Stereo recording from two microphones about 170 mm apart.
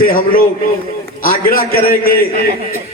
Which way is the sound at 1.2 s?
60° left (ahead or behind).